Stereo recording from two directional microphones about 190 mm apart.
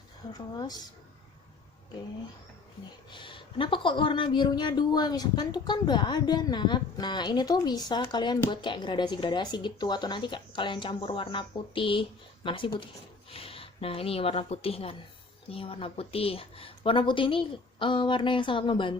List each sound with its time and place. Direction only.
0.5 s speech: 20° left (ahead or behind)
3.1 s a woman's voice: 25° left (ahead or behind)